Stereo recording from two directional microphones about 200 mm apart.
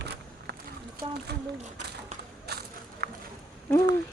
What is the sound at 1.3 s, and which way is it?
Speech, 55° right (ahead or behind).